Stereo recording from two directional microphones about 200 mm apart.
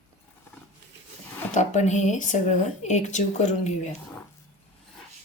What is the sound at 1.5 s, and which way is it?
Speech, 35° left (ahead or behind).